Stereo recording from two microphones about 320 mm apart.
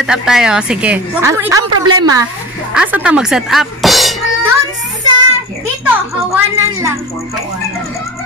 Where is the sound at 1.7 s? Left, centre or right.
Right.